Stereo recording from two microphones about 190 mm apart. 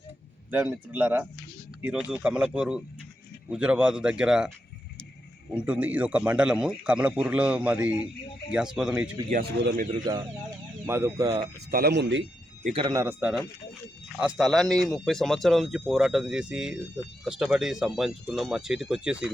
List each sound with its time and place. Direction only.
0.5 s a man's voice: 10° right (ahead or behind)
5.5 s a man's voice: 5° right (ahead or behind)
9.3 s a man's voice: 55° right (ahead or behind)
10.1 s a man's voice: 20° right (ahead or behind)
11.7 s speech: 55° right (ahead or behind)
12.6 s speech: 30° right (ahead or behind)
12.9 s a man's voice: 15° right (ahead or behind)